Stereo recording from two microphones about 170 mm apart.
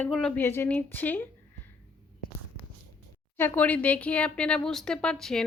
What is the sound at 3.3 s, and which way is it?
Speech, 10° left (ahead or behind).